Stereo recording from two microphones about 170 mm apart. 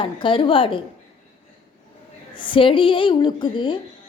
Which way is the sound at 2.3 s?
30° left (ahead or behind).